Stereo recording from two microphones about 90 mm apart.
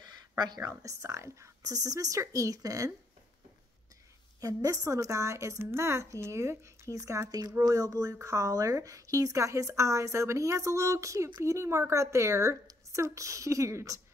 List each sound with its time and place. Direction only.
0.0 s a sound: 50° right (ahead or behind)
0.7 s a woman's voice: 35° right (ahead or behind)
4.4 s a woman's voice: 40° right (ahead or behind)